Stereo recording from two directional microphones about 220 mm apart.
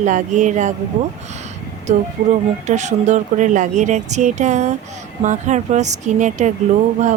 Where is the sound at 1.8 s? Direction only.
35° right (ahead or behind).